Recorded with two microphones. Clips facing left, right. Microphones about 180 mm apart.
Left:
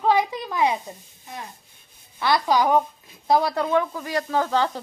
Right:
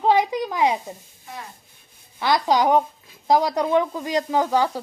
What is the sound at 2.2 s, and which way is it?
Speech, 15° right (ahead or behind).